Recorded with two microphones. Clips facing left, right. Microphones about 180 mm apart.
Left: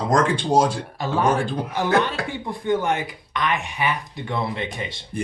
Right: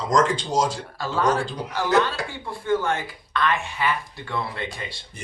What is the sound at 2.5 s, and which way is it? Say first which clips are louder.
Speech: left 1 dB; 20° left (ahead or behind).